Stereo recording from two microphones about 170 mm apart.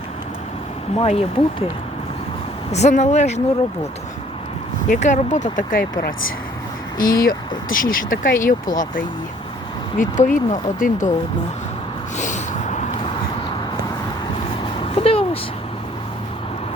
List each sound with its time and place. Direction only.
0.9 s speech: 35° left (ahead or behind)
2.7 s speech: 40° left (ahead or behind)
4.9 s speech: 45° left (ahead or behind)
7.0 s speech: 20° left (ahead or behind)
7.3 s speech: 55° left (ahead or behind)
12.1 s a sound: 45° left (ahead or behind)
14.8 s a sound: 35° left (ahead or behind)